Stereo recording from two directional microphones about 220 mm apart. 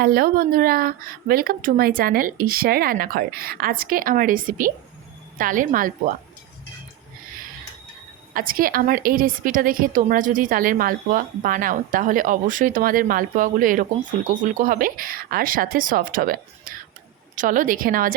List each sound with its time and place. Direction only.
0.0 s a woman's voice: 45° right (ahead or behind)
8.3 s a woman's voice: 40° right (ahead or behind)